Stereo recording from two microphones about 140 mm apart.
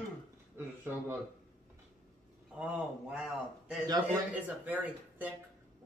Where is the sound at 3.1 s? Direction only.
5° right (ahead or behind).